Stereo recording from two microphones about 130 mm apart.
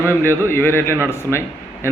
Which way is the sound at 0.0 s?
15° left (ahead or behind).